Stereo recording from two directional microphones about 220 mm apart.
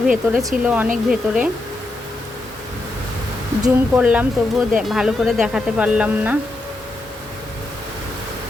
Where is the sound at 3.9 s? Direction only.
5° right (ahead or behind).